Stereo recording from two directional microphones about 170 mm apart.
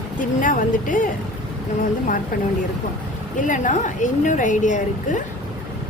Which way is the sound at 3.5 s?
50° left (ahead or behind).